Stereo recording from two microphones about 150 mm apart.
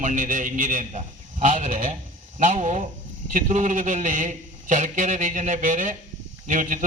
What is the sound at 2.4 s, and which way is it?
A man's voice, 55° right (ahead or behind).